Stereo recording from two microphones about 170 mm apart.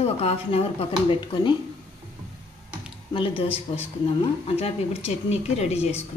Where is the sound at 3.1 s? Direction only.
30° left (ahead or behind).